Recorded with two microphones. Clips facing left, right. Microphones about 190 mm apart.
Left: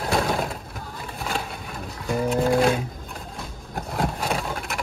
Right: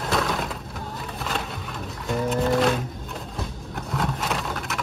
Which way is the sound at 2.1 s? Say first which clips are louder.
Left 2 dB; centre (ahead or behind).